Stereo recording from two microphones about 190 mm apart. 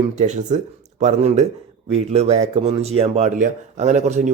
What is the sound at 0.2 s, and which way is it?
Speech, 40° right (ahead or behind).